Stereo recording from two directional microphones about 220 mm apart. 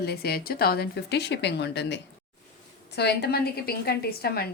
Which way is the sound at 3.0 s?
50° left (ahead or behind).